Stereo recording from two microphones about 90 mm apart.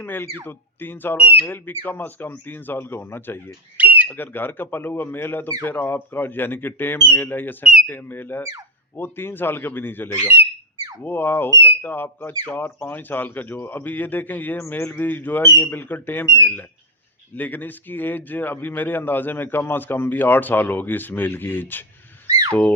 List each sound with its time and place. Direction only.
0.0 s speech: 25° left (ahead or behind)
1.1 s speech: 15° right (ahead or behind)
1.4 s speech: 20° left (ahead or behind)
3.8 s bird: 20° right (ahead or behind)
4.1 s speech: 20° left (ahead or behind)
7.6 s speech: 5° right (ahead or behind)
7.9 s speech: 20° left (ahead or behind)
22.3 s a sound: 40° right (ahead or behind)